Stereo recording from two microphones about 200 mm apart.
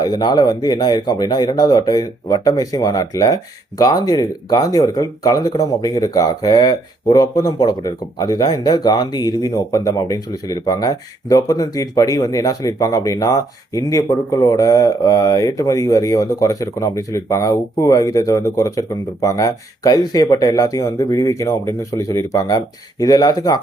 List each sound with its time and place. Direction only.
0.0 s speech: 20° left (ahead or behind)